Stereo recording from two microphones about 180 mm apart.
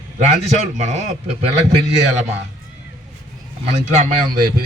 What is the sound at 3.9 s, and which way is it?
Speech, 55° right (ahead or behind).